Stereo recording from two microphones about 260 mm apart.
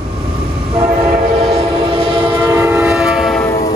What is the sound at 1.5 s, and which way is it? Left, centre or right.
Train, right.